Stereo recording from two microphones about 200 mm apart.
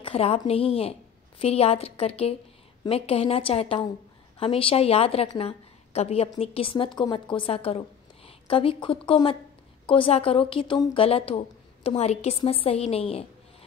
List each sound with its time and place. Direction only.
0.0 s a woman's voice: 30° left (ahead or behind)